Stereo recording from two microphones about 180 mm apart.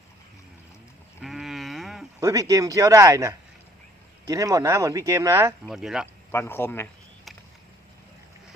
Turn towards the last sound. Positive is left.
turn(degrees=10)  # may be behind; listen again after turning